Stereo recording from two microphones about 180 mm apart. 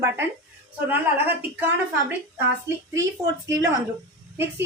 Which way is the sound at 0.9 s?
10° right (ahead or behind).